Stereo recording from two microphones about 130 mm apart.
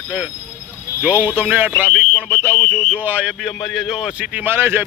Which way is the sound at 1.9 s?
10° left (ahead or behind).